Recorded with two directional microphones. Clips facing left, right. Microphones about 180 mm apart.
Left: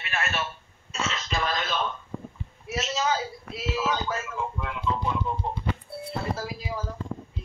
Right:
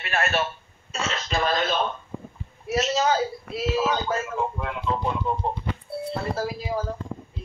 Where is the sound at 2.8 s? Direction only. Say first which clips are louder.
Right 4 dB; 60° right (ahead or behind).